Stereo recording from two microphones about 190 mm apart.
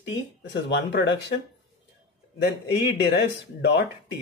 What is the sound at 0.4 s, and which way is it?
Speech, 65° left (ahead or behind).